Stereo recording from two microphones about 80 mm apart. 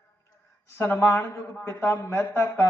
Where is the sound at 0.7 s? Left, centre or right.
Left.